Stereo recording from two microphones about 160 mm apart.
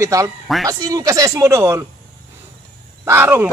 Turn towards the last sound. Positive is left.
turn(degrees=-15)  # may be behind; listen again after turning